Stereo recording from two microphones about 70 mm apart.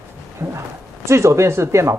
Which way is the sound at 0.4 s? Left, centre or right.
Right.